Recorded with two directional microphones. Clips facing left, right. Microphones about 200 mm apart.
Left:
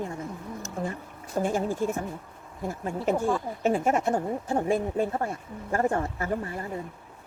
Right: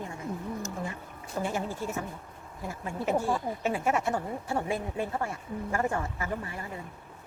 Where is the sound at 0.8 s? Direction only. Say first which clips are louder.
Left 4 dB; 40° left (ahead or behind).